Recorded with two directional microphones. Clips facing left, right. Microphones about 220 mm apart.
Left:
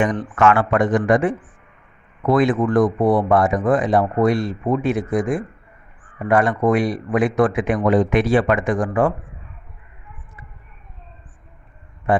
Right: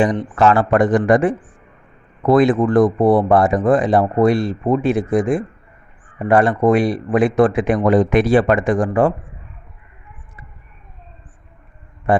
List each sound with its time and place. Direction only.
0.3 s a man's voice: 35° right (ahead or behind)
12.1 s speech: 35° right (ahead or behind)